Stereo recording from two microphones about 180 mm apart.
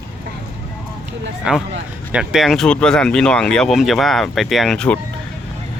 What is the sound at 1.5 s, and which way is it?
Speech, 5° right (ahead or behind).